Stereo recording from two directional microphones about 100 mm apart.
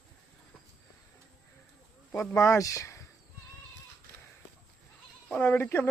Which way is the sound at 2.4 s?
30° left (ahead or behind).